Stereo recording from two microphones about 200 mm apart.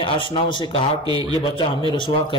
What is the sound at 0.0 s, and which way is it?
Speech, 25° left (ahead or behind).